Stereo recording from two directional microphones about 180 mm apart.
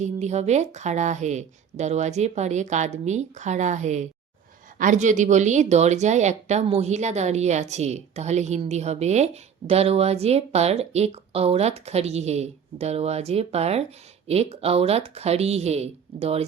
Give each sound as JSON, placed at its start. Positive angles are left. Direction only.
{"t": 0.0, "sound": "speech", "side_deg": -40}